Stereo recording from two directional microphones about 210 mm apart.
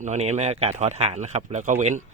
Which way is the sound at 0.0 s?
35° right (ahead or behind).